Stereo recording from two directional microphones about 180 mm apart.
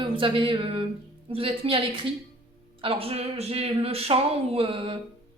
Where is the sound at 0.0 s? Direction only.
30° right (ahead or behind).